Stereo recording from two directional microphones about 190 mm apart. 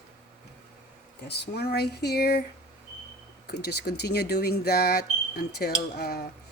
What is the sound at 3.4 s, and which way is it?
Speech, 60° left (ahead or behind).